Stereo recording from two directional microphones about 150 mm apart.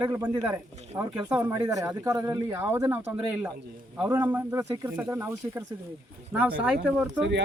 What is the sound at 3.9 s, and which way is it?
Speech, 5° right (ahead or behind).